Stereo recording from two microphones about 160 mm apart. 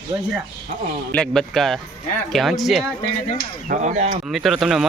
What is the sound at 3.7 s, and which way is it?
Speech, 50° right (ahead or behind).